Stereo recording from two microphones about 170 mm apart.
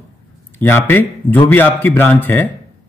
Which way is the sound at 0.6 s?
10° left (ahead or behind).